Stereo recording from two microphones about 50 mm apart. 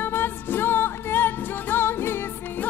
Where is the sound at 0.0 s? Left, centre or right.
Left.